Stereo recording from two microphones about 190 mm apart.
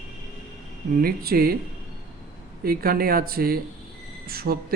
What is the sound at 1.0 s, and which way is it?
Speech, 50° right (ahead or behind).